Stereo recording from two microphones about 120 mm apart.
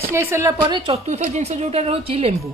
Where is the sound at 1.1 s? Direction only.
70° right (ahead or behind); by 2.4 s 55° right (ahead or behind).